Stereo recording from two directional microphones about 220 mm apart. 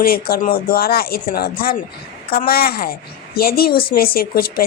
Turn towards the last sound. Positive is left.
turn(degrees=45)  # may be behind; listen again after turning